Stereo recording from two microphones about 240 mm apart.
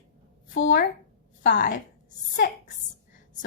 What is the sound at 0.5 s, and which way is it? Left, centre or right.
Speech, left.